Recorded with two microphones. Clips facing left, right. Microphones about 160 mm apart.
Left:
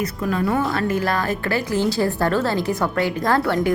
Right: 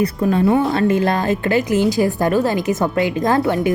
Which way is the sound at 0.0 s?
30° right (ahead or behind).